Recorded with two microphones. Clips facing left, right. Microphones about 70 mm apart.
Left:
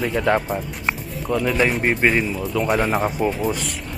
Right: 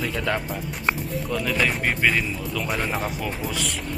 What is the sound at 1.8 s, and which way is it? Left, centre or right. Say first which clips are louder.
Speech: left 4 dB; left.